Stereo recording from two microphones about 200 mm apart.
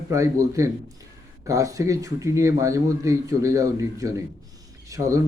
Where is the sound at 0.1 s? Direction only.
15° right (ahead or behind).